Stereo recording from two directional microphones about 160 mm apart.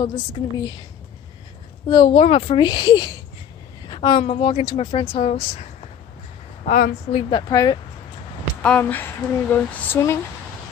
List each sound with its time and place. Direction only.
0.0 s a woman's voice: 25° left (ahead or behind)
1.9 s a woman's voice: 25° left (ahead or behind)
2.1 s speech: 40° left (ahead or behind)
6.6 s a woman's voice: 55° left (ahead or behind)
7.1 s a woman's voice: 35° left (ahead or behind)
8.6 s speech: 10° left (ahead or behind)